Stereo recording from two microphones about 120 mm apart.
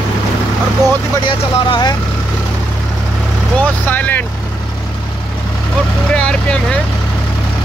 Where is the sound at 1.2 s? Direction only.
40° left (ahead or behind).